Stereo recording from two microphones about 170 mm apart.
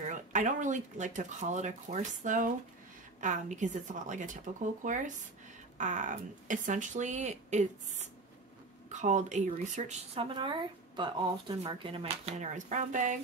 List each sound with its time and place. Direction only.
0.0 s speech: 45° right (ahead or behind)
10.2 s a woman's voice: 30° right (ahead or behind); by 13.2 s 45° right (ahead or behind)